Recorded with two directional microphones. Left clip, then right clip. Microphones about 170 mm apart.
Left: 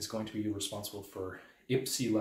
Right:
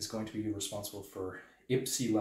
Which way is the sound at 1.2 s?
25° left (ahead or behind).